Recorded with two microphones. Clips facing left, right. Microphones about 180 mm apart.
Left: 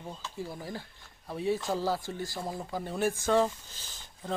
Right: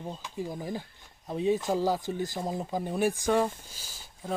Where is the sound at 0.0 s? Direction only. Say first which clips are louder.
Right 3 dB; 15° right (ahead or behind).